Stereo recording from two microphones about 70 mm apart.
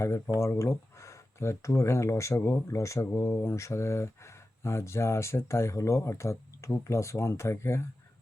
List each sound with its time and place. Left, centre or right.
0.3 s speech: left